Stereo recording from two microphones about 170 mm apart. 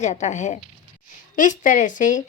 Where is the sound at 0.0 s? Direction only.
45° left (ahead or behind).